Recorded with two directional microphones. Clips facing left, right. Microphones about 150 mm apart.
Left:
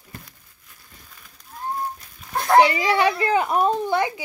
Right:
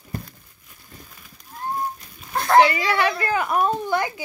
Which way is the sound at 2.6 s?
30° left (ahead or behind).